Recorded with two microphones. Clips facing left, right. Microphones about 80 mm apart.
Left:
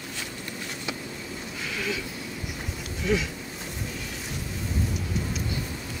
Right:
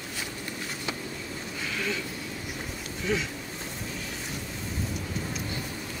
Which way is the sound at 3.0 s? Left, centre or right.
Centre.